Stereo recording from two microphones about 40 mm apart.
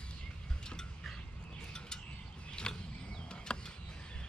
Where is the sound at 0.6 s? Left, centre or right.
Centre.